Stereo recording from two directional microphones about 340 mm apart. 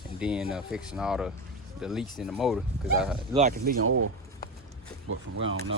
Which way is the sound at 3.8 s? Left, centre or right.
Right.